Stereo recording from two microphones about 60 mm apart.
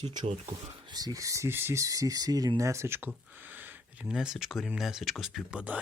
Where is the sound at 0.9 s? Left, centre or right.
Right.